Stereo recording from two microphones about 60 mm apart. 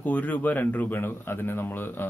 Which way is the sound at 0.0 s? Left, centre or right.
Left.